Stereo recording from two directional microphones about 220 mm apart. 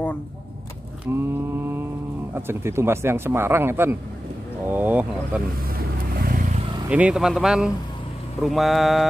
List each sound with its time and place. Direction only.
1.1 s a man's voice: 10° right (ahead or behind)
2.3 s a man's voice: 10° right (ahead or behind)
5.8 s vehicle: 40° right (ahead or behind)
6.9 s speech: 5° right (ahead or behind)